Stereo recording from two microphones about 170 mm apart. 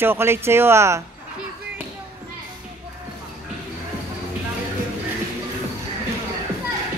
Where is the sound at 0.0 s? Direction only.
15° right (ahead or behind).